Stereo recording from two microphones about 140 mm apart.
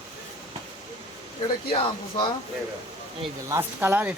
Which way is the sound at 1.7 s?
40° left (ahead or behind).